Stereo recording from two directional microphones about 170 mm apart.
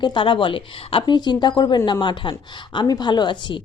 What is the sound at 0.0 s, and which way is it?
A woman's voice, 30° left (ahead or behind).